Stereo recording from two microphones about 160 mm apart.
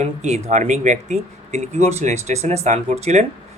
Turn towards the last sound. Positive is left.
turn(degrees=-45)  # may be behind; listen again after turning